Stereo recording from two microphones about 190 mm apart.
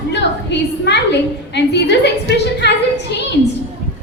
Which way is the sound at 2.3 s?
65° left (ahead or behind).